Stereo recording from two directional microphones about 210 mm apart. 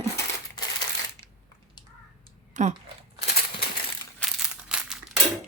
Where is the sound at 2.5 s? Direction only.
35° right (ahead or behind).